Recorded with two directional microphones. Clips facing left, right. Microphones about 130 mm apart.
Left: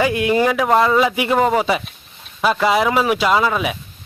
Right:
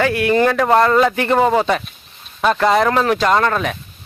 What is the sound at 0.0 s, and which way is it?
Speech, 15° left (ahead or behind).